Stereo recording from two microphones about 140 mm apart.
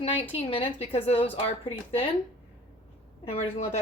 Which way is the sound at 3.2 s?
55° left (ahead or behind).